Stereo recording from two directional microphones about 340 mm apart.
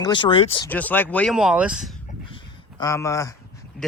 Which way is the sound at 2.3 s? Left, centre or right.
Centre.